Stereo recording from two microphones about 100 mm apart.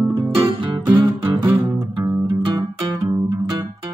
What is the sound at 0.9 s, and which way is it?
Music, 40° right (ahead or behind).